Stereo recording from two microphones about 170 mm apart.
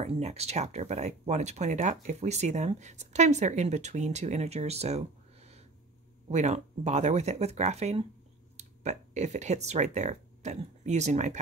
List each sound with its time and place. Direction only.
0.0 s speech: 40° right (ahead or behind)